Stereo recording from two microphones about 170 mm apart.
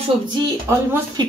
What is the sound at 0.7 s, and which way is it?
Speech, 15° right (ahead or behind).